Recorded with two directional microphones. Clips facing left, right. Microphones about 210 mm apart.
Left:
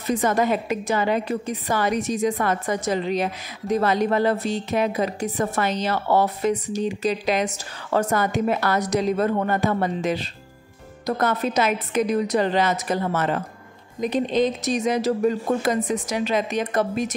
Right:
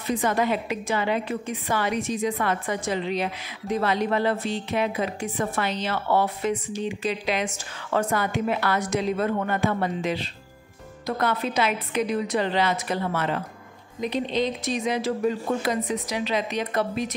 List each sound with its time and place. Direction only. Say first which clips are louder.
0.0 s a woman's voice: left 3 dB; 45° left (ahead or behind)